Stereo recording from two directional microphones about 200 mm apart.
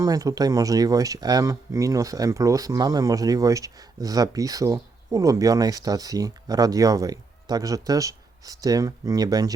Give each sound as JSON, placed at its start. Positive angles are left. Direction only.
{"t": 0.0, "sound": "speech", "side_deg": -15}